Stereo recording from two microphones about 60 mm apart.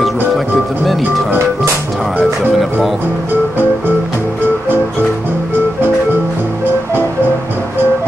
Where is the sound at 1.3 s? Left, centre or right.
Right.